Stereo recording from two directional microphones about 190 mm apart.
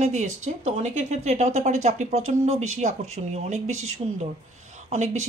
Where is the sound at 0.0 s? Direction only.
40° right (ahead or behind).